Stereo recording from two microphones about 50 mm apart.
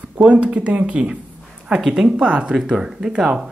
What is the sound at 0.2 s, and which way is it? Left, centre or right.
Speech, right.